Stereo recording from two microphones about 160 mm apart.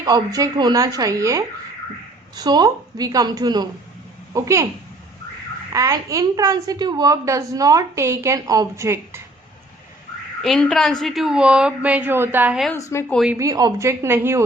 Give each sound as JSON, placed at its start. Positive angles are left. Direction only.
{"t": 0.0, "sound": "a woman's voice", "side_deg": -25}
{"t": 5.7, "sound": "a woman's voice", "side_deg": -20}
{"t": 10.4, "sound": "a woman's voice", "side_deg": 5}
{"t": 12.7, "sound": "a woman's voice", "side_deg": 15}
{"t": 13.4, "sound": "a woman's voice", "side_deg": -25}